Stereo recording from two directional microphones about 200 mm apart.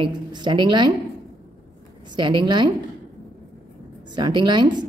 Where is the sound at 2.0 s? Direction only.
25° right (ahead or behind).